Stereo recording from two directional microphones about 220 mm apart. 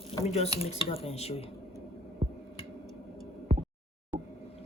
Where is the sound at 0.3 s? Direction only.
25° left (ahead or behind).